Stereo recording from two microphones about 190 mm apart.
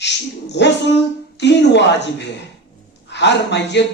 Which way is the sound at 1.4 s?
65° left (ahead or behind).